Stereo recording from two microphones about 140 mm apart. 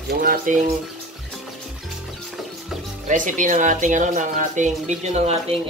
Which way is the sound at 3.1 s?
65° right (ahead or behind).